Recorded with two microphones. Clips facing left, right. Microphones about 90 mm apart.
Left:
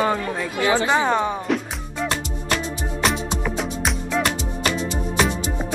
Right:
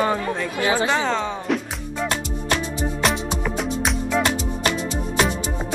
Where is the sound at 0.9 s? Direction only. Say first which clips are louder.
Left 3 dB; 15° left (ahead or behind).